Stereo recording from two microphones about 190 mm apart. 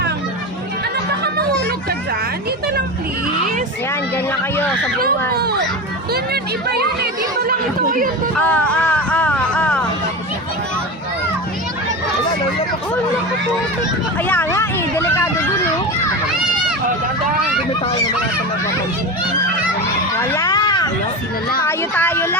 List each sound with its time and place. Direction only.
4.3 s speech: 10° left (ahead or behind)
5.3 s speech: 60° right (ahead or behind)
8.4 s a sound: 5° left (ahead or behind)
14.3 s speech: 10° left (ahead or behind)
20.1 s a sound: 15° left (ahead or behind)
21.6 s speech: 10° left (ahead or behind)